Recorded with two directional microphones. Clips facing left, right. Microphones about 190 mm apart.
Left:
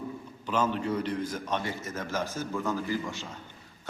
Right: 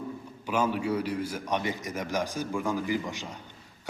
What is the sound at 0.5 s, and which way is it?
A man's voice, 10° right (ahead or behind).